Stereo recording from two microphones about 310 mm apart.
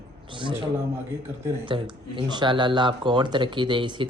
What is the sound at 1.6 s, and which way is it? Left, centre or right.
Speech, centre.